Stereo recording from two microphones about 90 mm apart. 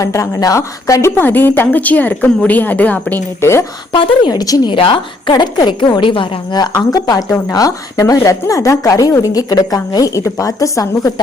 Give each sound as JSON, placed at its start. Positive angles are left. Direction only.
{"t": 0.0, "sound": "speech", "side_deg": 35}
{"t": 1.2, "sound": "a woman's voice", "side_deg": 20}
{"t": 3.9, "sound": "a woman's voice", "side_deg": 70}
{"t": 4.3, "sound": "speech", "side_deg": 45}
{"t": 4.7, "sound": "a woman's voice", "side_deg": 70}
{"t": 5.3, "sound": "a woman's voice", "side_deg": 55}
{"t": 6.5, "sound": "speech", "side_deg": 50}